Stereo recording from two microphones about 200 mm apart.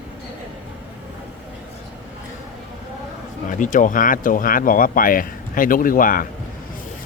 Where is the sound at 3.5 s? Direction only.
40° left (ahead or behind).